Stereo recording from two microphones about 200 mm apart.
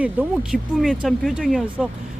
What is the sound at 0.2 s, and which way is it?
Speech, 10° right (ahead or behind).